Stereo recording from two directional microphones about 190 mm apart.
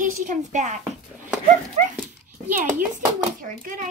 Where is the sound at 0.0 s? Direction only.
40° right (ahead or behind).